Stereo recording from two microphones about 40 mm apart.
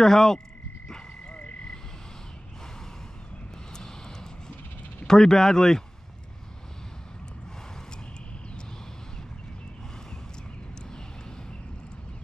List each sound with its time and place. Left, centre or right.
0.0 s speech: centre
0.8 s frog: centre
3.7 s vehicle: centre
5.0 s speech: centre